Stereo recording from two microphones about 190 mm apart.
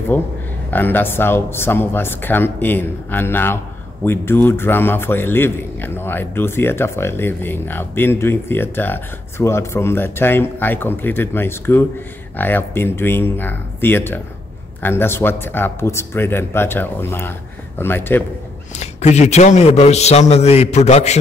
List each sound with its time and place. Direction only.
0.1 s a man's voice: 10° left (ahead or behind)
18.8 s a man's voice: 35° left (ahead or behind)